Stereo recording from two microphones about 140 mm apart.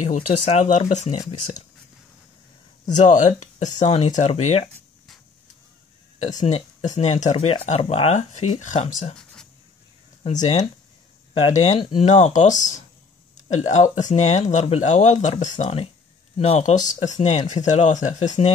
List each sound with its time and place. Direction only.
0.0 s speech: 60° left (ahead or behind)
3.0 s speech: 60° left (ahead or behind)
6.4 s speech: 55° left (ahead or behind)
9.1 s writing: 5° left (ahead or behind)
10.2 s speech: 55° left (ahead or behind)
11.8 s speech: 40° left (ahead or behind)
12.1 s speech: 55° left (ahead or behind)